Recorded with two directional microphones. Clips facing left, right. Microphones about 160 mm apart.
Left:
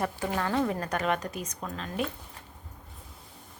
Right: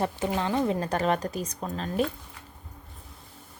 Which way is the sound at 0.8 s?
30° right (ahead or behind).